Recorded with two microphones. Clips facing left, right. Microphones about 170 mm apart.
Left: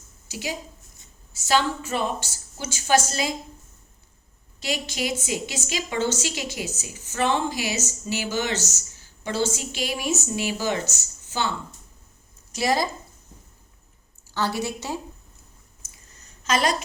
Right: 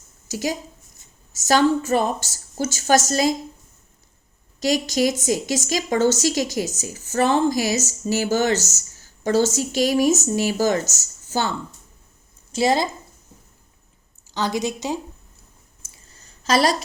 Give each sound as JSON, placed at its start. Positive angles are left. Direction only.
{"t": 0.3, "sound": "a woman's voice", "side_deg": -40}
{"t": 4.6, "sound": "a woman's voice", "side_deg": -40}
{"t": 12.5, "sound": "a woman's voice", "side_deg": -25}
{"t": 14.3, "sound": "a woman's voice", "side_deg": -15}
{"t": 15.8, "sound": "a sound", "side_deg": -30}